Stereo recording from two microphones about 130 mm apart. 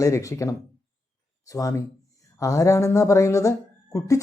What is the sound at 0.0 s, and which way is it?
Speech, 25° left (ahead or behind).